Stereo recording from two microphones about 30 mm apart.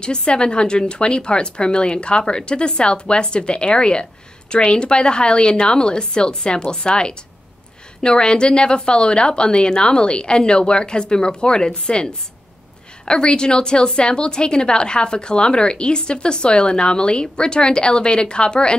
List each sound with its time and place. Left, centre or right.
0.0 s a woman's voice: left